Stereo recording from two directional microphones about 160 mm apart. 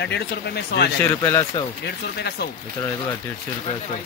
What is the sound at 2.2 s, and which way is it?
Speech, 90° left.